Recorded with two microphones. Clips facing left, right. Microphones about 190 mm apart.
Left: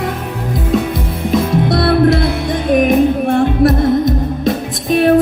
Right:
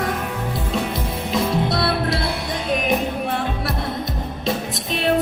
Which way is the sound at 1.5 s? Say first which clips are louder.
Left 8 dB; 50° left (ahead or behind).